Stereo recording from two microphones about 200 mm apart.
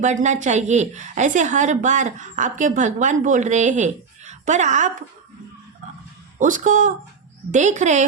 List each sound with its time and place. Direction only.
0.0 s a woman's voice: 35° right (ahead or behind)
6.4 s a woman's voice: 40° right (ahead or behind)